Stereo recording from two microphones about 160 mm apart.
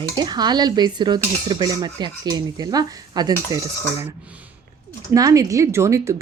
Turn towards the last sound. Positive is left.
turn(degrees=-20)  # may be behind; listen again after turning